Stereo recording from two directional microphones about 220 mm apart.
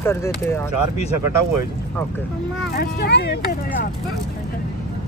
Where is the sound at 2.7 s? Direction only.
45° left (ahead or behind).